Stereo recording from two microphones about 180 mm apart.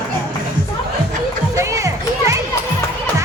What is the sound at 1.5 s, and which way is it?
Children playing, 15° right (ahead or behind).